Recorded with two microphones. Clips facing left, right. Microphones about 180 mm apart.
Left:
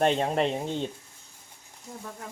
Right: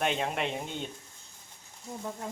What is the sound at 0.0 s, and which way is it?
Speech, 35° left (ahead or behind).